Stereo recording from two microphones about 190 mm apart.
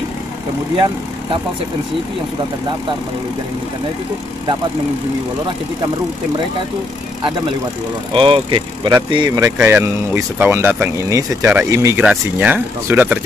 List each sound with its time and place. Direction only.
8.1 s speech: 25° right (ahead or behind); by 13.2 s 10° right (ahead or behind)